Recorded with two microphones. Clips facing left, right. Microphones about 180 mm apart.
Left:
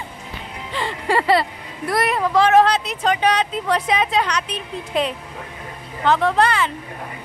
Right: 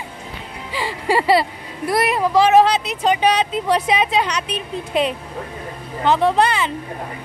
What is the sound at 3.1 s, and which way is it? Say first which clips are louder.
Speech: right 2 dB; 25° right (ahead or behind).